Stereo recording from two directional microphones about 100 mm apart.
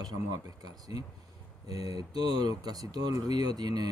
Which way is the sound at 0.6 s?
40° right (ahead or behind).